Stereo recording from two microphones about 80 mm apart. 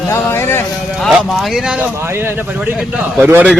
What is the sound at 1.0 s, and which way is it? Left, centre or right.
Speech, centre.